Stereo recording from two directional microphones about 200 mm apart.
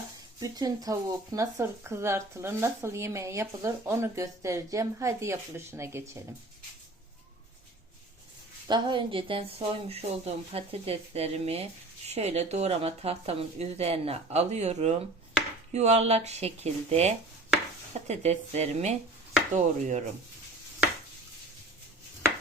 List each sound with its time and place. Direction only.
0.3 s speech: 20° right (ahead or behind)
8.6 s speech: 20° right (ahead or behind)